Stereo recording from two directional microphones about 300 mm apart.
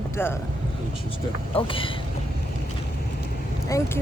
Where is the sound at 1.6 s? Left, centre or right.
Centre.